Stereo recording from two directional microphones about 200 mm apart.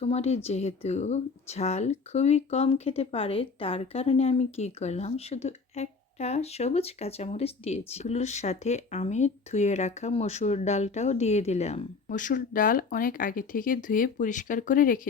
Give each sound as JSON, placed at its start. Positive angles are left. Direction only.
{"t": 0.0, "sound": "speech", "side_deg": 30}